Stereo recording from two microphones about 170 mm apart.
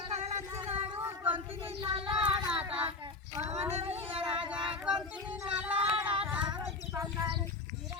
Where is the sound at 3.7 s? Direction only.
35° right (ahead or behind).